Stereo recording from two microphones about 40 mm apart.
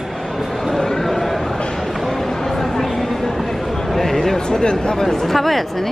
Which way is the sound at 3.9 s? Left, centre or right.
Centre.